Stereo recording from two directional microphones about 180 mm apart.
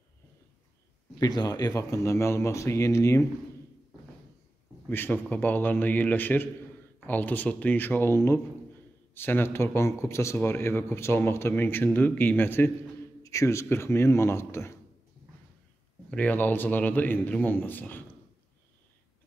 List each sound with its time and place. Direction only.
1.2 s a man's voice: 20° left (ahead or behind)
4.8 s a man's voice: 10° left (ahead or behind)
16.1 s a man's voice: 10° left (ahead or behind)